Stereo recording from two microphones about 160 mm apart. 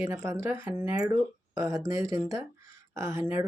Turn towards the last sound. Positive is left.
turn(degrees=-15)  # may be behind; listen again after turning